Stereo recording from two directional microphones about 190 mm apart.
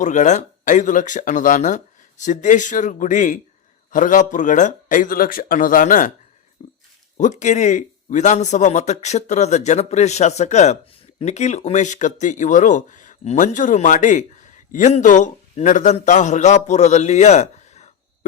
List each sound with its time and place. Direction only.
0.0 s speech: 40° left (ahead or behind)
6.6 s a sound: 30° left (ahead or behind)
7.2 s speech: 40° left (ahead or behind)